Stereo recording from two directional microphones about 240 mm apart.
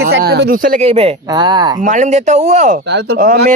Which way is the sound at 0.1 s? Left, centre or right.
Right.